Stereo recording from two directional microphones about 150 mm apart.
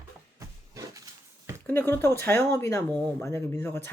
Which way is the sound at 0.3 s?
20° right (ahead or behind).